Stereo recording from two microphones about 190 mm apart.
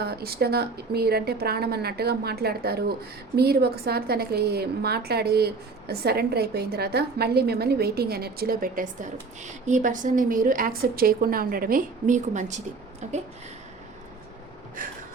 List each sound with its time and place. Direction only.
0.0 s a woman's voice: 55° right (ahead or behind); by 13.2 s 35° right (ahead or behind)